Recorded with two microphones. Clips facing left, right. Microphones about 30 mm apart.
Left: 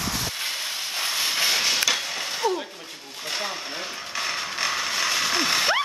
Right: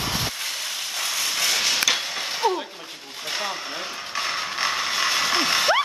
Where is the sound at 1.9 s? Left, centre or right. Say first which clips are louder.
Right 1 dB; centre.